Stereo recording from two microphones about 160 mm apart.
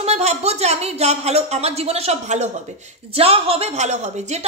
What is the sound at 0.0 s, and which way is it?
A woman's voice, 45° right (ahead or behind).